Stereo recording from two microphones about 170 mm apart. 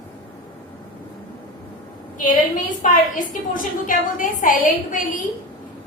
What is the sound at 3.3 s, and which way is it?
A woman's voice, 50° left (ahead or behind).